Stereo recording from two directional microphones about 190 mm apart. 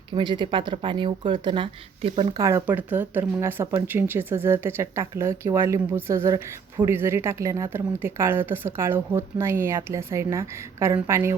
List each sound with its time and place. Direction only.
0.1 s speech: 25° right (ahead or behind)